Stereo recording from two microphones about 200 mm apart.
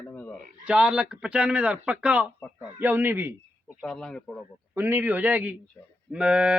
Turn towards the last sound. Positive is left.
turn(degrees=-5)  # may be behind; listen again after turning